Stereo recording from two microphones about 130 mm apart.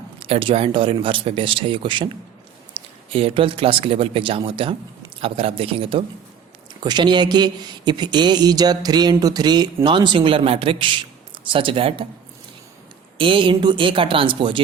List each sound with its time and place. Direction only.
0.2 s speech: 45° right (ahead or behind)
6.7 s speech: 35° right (ahead or behind)
13.1 s speech: 40° right (ahead or behind)